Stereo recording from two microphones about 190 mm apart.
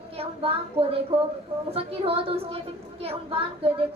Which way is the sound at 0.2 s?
30° right (ahead or behind).